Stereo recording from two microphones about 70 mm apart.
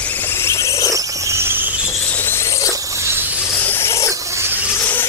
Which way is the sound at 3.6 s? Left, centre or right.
Left.